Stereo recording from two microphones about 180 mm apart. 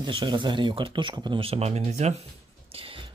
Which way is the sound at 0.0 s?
25° right (ahead or behind).